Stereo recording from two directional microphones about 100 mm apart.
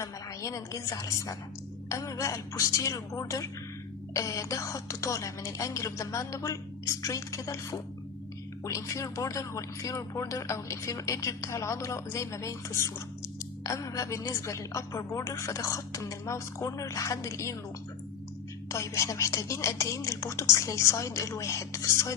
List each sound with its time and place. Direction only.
0.0 s speech: 30° left (ahead or behind)
18.7 s speech: 30° left (ahead or behind)